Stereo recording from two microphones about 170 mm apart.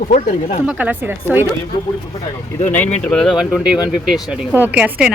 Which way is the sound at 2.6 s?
10° left (ahead or behind).